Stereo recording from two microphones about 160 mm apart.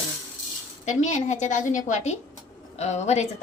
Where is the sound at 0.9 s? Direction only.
50° left (ahead or behind).